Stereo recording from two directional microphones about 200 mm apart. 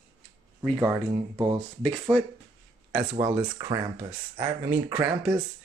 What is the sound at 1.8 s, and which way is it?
Speech, 5° left (ahead or behind).